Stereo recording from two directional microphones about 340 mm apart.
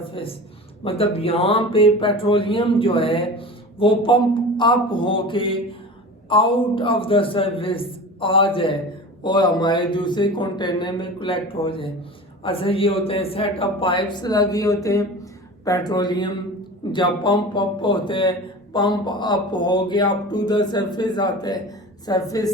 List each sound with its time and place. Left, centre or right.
0.1 s a man's voice: centre